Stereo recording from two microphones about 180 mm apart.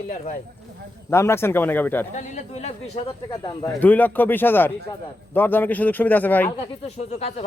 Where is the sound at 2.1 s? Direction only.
40° left (ahead or behind).